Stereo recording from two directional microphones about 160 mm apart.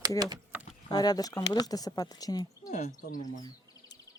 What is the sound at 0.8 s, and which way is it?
Speech, 25° left (ahead or behind).